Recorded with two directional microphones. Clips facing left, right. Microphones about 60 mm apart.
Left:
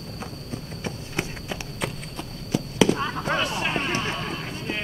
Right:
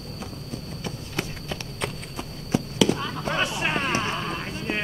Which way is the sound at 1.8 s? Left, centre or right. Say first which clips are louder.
Even; centre.